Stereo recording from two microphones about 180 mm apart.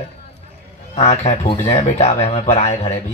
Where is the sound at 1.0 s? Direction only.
35° left (ahead or behind).